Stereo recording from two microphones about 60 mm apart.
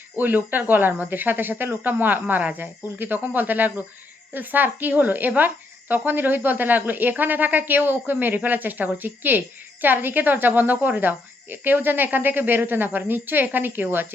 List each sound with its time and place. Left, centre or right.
0.2 s speech: right